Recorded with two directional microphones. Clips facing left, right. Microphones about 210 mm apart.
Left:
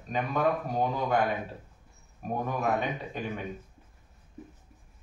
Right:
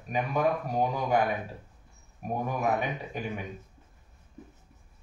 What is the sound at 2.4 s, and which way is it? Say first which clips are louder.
Speech: even; 10° right (ahead or behind).